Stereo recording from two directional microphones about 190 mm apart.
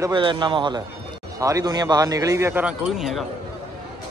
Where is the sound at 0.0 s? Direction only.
25° right (ahead or behind).